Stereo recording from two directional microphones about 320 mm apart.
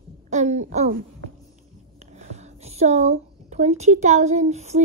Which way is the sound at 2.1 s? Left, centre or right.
Right.